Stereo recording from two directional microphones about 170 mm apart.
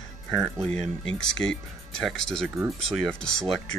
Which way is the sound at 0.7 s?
40° right (ahead or behind).